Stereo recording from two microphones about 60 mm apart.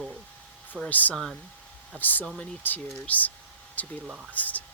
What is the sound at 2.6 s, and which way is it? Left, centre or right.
Speech, left.